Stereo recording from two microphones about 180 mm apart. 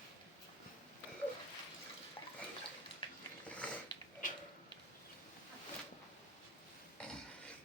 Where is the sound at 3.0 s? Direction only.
30° left (ahead or behind).